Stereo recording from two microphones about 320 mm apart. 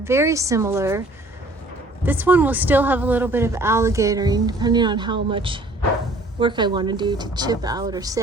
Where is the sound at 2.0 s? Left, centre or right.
Centre.